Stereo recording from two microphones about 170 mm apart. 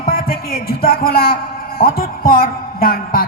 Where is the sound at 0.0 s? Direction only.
60° left (ahead or behind).